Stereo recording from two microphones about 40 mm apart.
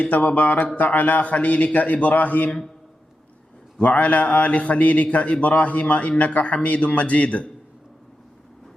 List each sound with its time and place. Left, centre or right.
0.0 s a man's voice: left
3.8 s a man's voice: left